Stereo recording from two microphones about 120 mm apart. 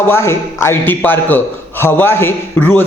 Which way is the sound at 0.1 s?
20° left (ahead or behind).